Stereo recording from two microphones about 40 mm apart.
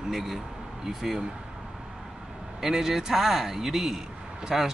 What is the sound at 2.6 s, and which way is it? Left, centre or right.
Speech, centre.